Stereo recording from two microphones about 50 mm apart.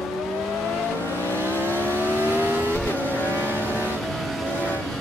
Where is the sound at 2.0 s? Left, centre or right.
Right.